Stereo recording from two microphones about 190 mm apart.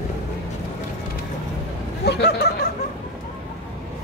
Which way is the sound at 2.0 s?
60° left (ahead or behind).